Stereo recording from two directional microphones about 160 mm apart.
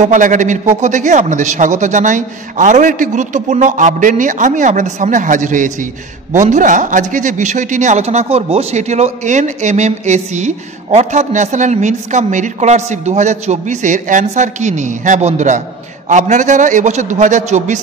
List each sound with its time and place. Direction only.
0.0 s a man's voice: 50° right (ahead or behind)